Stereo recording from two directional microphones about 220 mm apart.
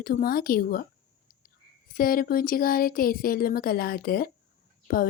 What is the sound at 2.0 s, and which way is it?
Speech, 40° left (ahead or behind).